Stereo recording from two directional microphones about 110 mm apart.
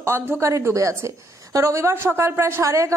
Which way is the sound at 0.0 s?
25° right (ahead or behind).